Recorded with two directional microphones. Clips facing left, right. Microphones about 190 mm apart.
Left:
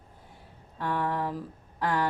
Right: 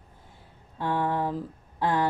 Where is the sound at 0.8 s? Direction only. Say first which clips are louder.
Right 3 dB; 25° right (ahead or behind).